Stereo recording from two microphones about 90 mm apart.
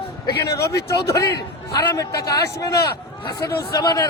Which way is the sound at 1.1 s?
45° left (ahead or behind).